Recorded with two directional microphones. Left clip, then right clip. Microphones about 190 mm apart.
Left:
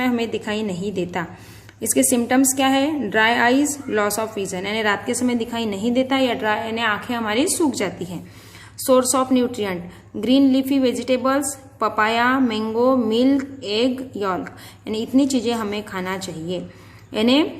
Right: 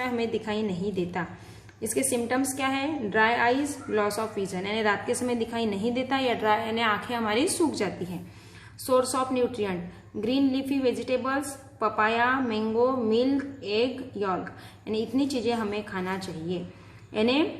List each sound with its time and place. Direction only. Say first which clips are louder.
0.0 s a woman's voice: left 6 dB; 35° left (ahead or behind)